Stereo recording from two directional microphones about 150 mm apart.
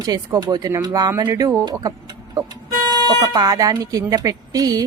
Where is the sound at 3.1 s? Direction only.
25° right (ahead or behind).